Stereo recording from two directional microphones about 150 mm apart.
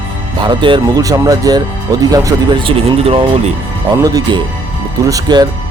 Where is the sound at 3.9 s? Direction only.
25° right (ahead or behind).